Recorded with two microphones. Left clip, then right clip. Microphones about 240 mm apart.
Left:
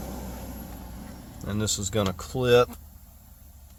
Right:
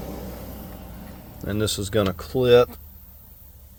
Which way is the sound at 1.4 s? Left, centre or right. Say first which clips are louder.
Right 4 dB; centre.